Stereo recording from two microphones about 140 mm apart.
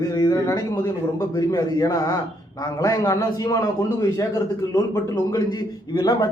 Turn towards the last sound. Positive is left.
turn(degrees=30)  # may be behind; listen again after turning